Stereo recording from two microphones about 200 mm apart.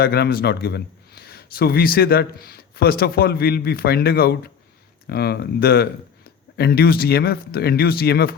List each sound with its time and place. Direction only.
0.0 s a man's voice: 50° left (ahead or behind)